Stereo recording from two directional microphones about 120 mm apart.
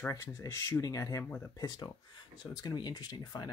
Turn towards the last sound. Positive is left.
turn(degrees=35)  # may be behind; listen again after turning